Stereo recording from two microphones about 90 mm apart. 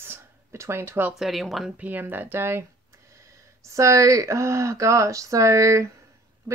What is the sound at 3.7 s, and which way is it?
A woman's voice, 35° right (ahead or behind).